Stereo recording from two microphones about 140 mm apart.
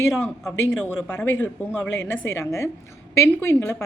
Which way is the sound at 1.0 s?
15° left (ahead or behind).